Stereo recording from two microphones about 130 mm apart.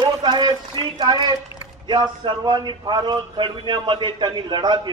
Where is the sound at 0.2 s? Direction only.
30° right (ahead or behind).